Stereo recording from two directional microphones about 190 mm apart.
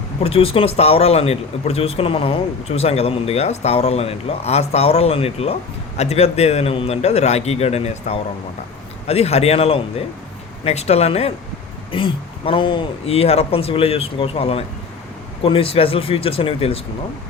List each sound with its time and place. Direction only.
0.2 s speech: 30° left (ahead or behind)